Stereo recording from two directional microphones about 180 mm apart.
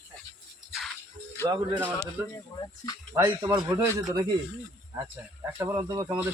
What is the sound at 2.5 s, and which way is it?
Speech, 25° left (ahead or behind).